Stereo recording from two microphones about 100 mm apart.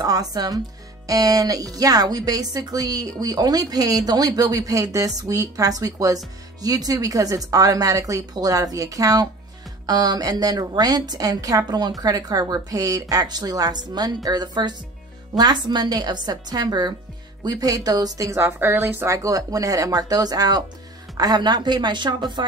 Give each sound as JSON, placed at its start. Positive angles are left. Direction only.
{"t": 0.0, "sound": "a woman's voice", "side_deg": -40}
{"t": 19.1, "sound": "a woman's voice", "side_deg": -35}